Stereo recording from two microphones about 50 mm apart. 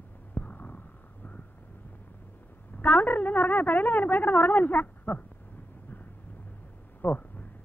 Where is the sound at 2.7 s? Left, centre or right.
Left.